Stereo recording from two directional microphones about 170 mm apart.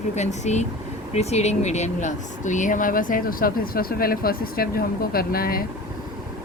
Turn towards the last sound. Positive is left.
turn(degrees=60)  # may be behind; listen again after turning